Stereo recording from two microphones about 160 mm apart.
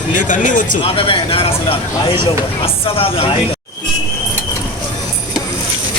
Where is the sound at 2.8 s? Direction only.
35° left (ahead or behind).